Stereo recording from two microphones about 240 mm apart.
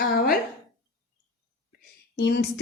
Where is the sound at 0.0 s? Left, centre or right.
Left.